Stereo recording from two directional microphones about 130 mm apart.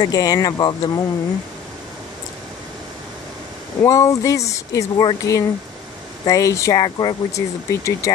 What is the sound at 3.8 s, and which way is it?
Speech, 25° left (ahead or behind).